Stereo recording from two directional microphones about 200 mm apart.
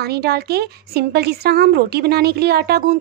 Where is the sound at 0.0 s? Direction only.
55° right (ahead or behind).